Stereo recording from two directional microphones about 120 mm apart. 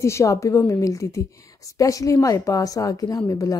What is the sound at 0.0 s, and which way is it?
Speech, 25° left (ahead or behind).